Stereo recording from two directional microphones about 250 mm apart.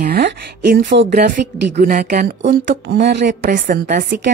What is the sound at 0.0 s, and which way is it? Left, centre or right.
A woman's voice, right.